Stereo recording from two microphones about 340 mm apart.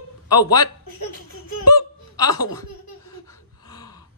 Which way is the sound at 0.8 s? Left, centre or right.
Left.